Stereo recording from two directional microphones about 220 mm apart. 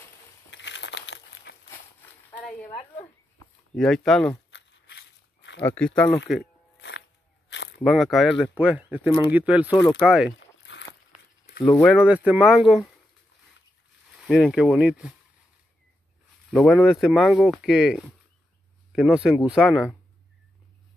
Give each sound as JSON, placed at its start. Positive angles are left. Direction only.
{"t": 0.5, "sound": "crumpling", "side_deg": 55}
{"t": 2.0, "sound": "a sound", "side_deg": 10}
{"t": 3.7, "sound": "speech", "side_deg": 0}
{"t": 4.5, "sound": "a sound", "side_deg": 50}
{"t": 5.7, "sound": "speech", "side_deg": 5}
{"t": 7.4, "sound": "a sound", "side_deg": 55}
{"t": 7.8, "sound": "speech", "side_deg": 0}
{"t": 10.6, "sound": "walk", "side_deg": 55}
{"t": 11.7, "sound": "speech", "side_deg": 0}
{"t": 14.2, "sound": "speech", "side_deg": 0}
{"t": 16.5, "sound": "speech", "side_deg": 0}